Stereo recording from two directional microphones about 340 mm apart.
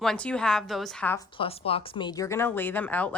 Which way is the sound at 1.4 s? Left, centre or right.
Centre.